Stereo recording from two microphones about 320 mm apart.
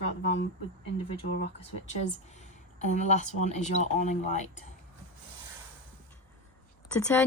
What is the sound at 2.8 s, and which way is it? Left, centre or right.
Speech, left.